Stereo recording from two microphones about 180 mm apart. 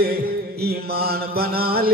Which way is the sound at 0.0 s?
60° right (ahead or behind).